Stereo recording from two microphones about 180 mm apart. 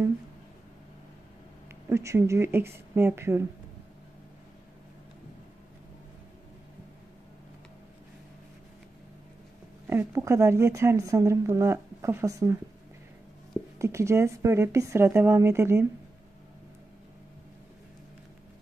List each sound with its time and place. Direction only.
1.9 s speech: 15° right (ahead or behind)
9.8 s speech: 15° right (ahead or behind)
13.7 s speech: 15° right (ahead or behind)